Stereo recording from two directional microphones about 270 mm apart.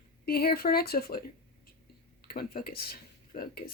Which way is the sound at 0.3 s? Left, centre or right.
Left.